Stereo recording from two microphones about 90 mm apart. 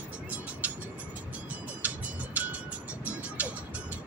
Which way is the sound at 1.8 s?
15° right (ahead or behind).